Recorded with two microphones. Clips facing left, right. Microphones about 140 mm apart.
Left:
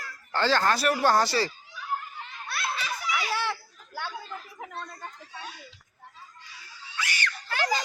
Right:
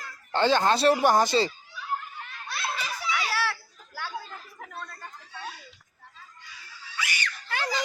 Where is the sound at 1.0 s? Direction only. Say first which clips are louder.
Right 2 dB; 20° right (ahead or behind).